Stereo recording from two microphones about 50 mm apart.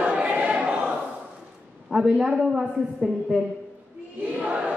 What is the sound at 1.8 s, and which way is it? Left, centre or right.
A man's voice, centre.